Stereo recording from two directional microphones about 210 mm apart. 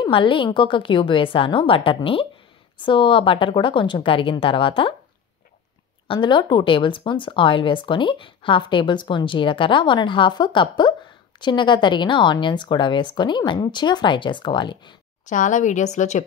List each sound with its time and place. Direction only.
0.0 s speech: 25° left (ahead or behind)
6.0 s speech: 20° left (ahead or behind)
15.2 s a woman's voice: 35° left (ahead or behind)